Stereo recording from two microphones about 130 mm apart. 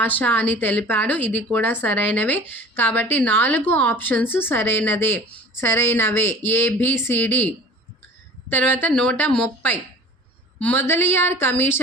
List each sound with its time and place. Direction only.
0.0 s a woman's voice: 15° left (ahead or behind)
8.5 s a woman's voice: 15° left (ahead or behind)